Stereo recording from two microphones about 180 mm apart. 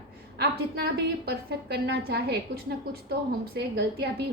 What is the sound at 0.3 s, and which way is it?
A woman's voice, 60° right (ahead or behind).